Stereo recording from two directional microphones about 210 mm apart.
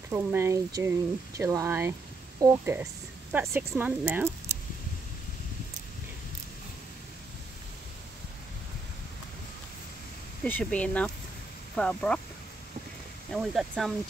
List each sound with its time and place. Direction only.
0.1 s speech: 10° right (ahead or behind)
10.4 s speech: 5° left (ahead or behind)
13.3 s speech: centre (ahead or behind)